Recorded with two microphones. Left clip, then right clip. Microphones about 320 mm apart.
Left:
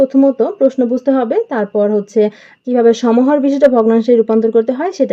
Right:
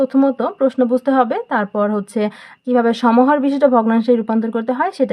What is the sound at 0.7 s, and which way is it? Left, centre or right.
Speech, right.